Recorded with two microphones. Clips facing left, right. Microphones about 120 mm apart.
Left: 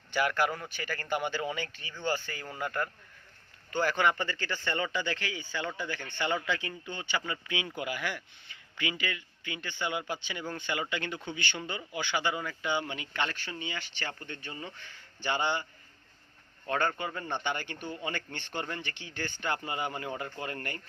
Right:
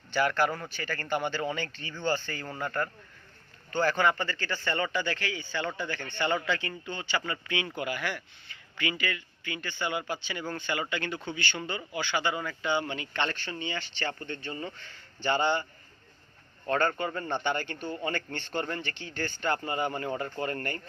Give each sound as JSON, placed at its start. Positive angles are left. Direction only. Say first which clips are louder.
{"t": 0.1, "sound": "speech", "louder": "right 2 dB", "side_deg": 15}
{"t": 16.6, "sound": "speech", "louder": "right 3 dB", "side_deg": 15}